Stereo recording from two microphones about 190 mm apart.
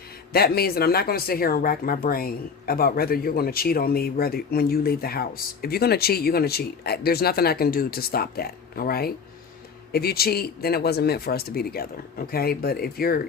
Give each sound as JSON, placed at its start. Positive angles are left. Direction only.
{"t": 0.3, "sound": "speech", "side_deg": 55}